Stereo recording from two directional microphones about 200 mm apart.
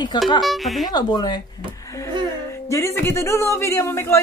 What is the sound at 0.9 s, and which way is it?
Speech, 20° left (ahead or behind).